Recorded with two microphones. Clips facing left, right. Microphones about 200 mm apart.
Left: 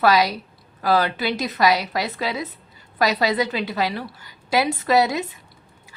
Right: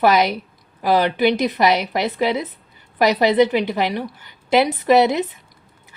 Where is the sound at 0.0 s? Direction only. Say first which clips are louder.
Right 2 dB; 20° right (ahead or behind).